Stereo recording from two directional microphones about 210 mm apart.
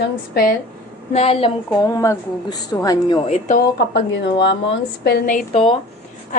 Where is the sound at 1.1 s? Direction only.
30° left (ahead or behind).